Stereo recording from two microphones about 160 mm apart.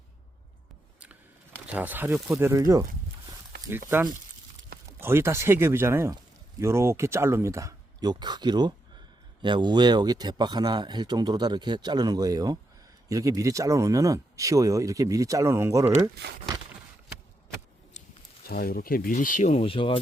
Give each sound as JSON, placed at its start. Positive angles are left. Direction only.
{"t": 1.6, "sound": "speech", "side_deg": -10}
{"t": 18.4, "sound": "speech", "side_deg": 70}